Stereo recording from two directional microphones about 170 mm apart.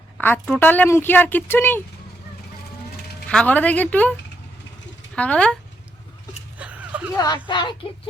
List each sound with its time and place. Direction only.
0.2 s a woman's voice: 10° left (ahead or behind)
3.2 s a woman's voice: 10° left (ahead or behind)
5.1 s a woman's voice: 5° left (ahead or behind)
6.6 s a sound: 10° right (ahead or behind)
7.2 s speech: 25° left (ahead or behind)